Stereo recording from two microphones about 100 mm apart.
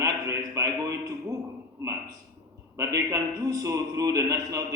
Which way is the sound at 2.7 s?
35° right (ahead or behind).